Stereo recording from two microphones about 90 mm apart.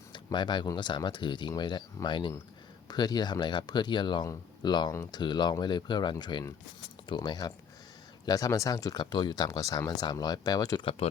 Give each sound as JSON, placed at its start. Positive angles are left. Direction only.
{"t": 0.1, "sound": "a sound", "side_deg": 55}
{"t": 0.8, "sound": "speech", "side_deg": 60}
{"t": 11.0, "sound": "speech", "side_deg": 90}